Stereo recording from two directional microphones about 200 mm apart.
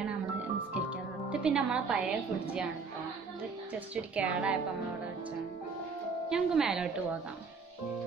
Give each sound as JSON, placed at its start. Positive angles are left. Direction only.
{"t": 0.8, "sound": "music", "side_deg": -5}
{"t": 3.9, "sound": "a woman's voice", "side_deg": -5}
{"t": 6.3, "sound": "a woman's voice", "side_deg": -5}